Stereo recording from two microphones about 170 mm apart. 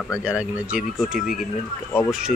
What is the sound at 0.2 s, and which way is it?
Speech, 5° right (ahead or behind).